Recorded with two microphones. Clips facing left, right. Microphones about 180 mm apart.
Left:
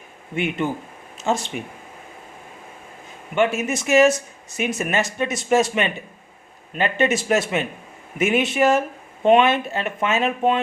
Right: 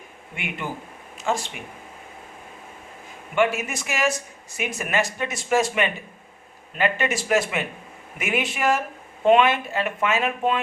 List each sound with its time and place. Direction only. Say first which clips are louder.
0.6 s speech: left 7 dB; 20° left (ahead or behind)
3.3 s speech: left 2 dB; 25° left (ahead or behind)